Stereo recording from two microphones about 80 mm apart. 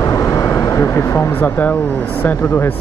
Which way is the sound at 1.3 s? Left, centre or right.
Left.